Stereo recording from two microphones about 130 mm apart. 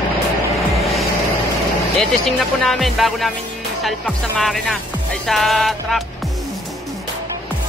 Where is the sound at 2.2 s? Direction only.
Centre (ahead or behind).